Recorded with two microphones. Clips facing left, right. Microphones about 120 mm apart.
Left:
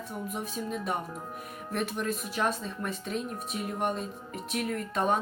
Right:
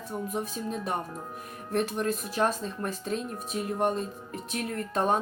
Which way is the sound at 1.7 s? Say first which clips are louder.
Right 4 dB; 40° right (ahead or behind).